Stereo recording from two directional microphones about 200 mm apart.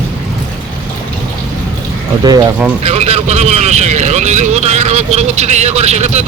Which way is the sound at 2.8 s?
30° right (ahead or behind).